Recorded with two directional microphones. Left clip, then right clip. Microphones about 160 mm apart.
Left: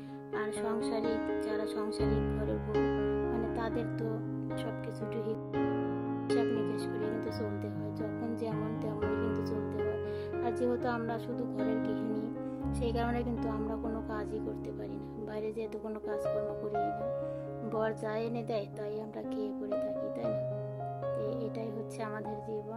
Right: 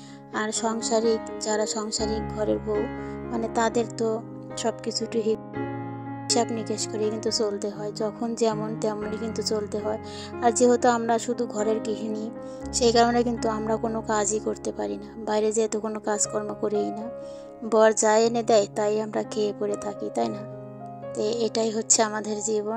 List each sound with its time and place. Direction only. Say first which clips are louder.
0.4 s a woman's voice: right 7 dB; 45° right (ahead or behind)
6.7 s a woman's voice: right 8 dB; 45° right (ahead or behind)
17.6 s a woman's voice: right 16 dB; 45° right (ahead or behind)